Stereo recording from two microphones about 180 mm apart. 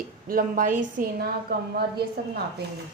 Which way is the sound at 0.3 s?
50° right (ahead or behind).